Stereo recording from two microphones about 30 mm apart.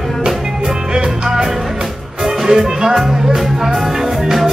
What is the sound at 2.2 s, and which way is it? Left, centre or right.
Music, centre.